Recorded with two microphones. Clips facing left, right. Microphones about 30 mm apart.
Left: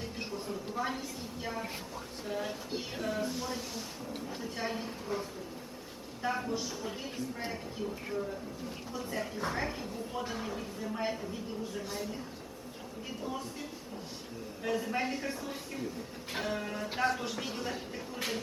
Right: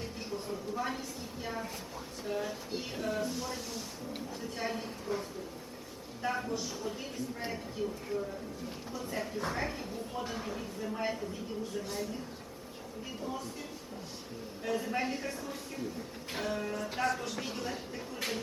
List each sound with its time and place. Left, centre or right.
0.8 s a sound: centre
2.4 s speech: centre
6.2 s speech: centre
6.5 s speech: centre
8.9 s speech: centre
13.2 s speech: centre
17.3 s speech: centre